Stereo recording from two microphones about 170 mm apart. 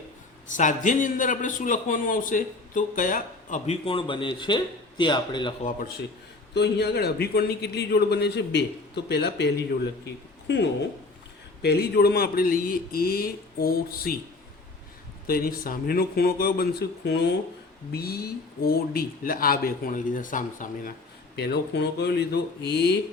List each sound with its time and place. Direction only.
0.4 s a man's voice: 50° left (ahead or behind)
3.8 s a man's voice: 30° left (ahead or behind)
6.5 s a man's voice: 80° left
10.4 s speech: 90° left
11.6 s speech: 70° left (ahead or behind)
15.3 s speech: 60° left (ahead or behind); by 17.3 s 85° left
17.9 s speech: 65° left (ahead or behind)
21.3 s a man's voice: 75° left (ahead or behind)